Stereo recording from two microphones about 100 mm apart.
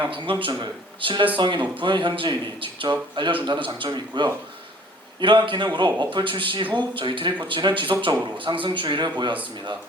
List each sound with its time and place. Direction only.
0.1 s a man's voice: 60° right (ahead or behind)